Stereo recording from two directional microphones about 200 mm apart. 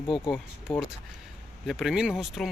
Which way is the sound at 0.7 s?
20° left (ahead or behind).